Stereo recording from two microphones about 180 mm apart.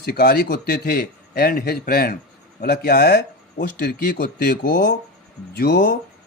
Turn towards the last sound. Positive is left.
turn(degrees=65)  # may be behind; listen again after turning